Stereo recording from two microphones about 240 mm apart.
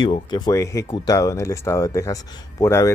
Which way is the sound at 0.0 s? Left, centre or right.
Centre.